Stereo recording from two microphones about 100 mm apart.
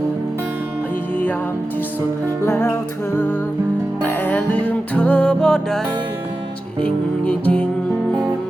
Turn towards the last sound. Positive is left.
turn(degrees=10)  # may be behind; listen again after turning